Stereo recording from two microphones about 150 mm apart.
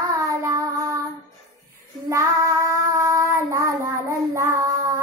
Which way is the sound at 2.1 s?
20° right (ahead or behind).